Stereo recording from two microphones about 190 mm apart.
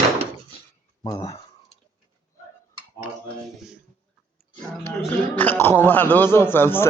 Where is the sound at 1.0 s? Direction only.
15° left (ahead or behind).